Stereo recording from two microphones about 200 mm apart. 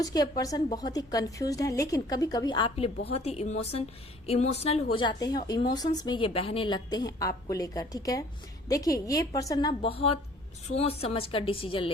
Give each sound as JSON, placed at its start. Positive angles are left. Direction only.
{"t": 0.0, "sound": "a woman's voice", "side_deg": 20}